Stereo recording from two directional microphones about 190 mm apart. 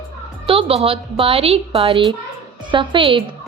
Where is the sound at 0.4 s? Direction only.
30° right (ahead or behind).